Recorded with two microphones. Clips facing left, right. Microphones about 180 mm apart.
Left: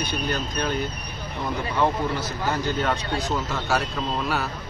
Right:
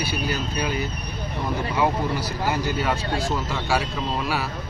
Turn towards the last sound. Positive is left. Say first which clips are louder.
# right 1 dB
turn(degrees=0)  # may be behind; listen again after turning